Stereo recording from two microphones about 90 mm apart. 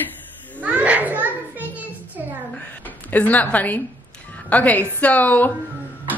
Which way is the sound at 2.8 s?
20° left (ahead or behind).